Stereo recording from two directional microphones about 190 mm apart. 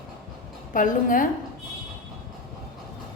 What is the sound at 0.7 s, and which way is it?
Speech, 45° left (ahead or behind).